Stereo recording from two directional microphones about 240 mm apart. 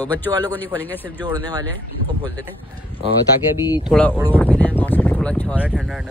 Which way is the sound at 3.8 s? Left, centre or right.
Centre.